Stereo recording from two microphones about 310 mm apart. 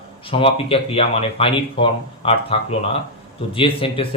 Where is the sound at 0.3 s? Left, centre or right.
Centre.